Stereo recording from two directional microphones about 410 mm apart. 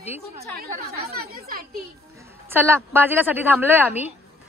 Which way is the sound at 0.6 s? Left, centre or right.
Right.